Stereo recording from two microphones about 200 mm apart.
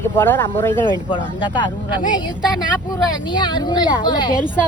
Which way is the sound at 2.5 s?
20° left (ahead or behind).